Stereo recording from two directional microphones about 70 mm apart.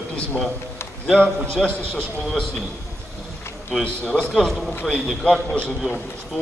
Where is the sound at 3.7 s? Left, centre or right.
Centre.